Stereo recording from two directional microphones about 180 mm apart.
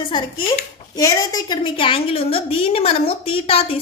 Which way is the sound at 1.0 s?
20° left (ahead or behind).